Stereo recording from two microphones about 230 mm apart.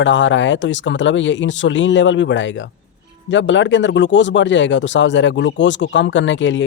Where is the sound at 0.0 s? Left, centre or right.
Left.